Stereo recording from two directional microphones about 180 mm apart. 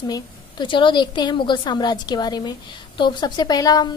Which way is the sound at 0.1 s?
25° left (ahead or behind).